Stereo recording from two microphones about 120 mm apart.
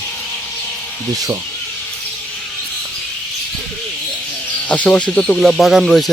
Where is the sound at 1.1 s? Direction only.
30° right (ahead or behind).